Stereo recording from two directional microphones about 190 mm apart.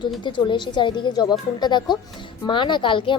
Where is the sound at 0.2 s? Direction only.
25° left (ahead or behind).